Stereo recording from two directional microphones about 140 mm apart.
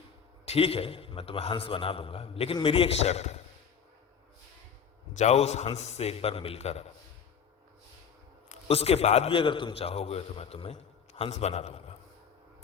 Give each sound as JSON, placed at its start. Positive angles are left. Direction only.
{"t": 0.4, "sound": "a man's voice", "side_deg": 45}
{"t": 5.1, "sound": "a man's voice", "side_deg": 55}
{"t": 8.4, "sound": "a man's voice", "side_deg": 45}